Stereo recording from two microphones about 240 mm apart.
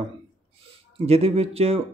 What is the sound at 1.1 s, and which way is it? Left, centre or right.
Speech, right.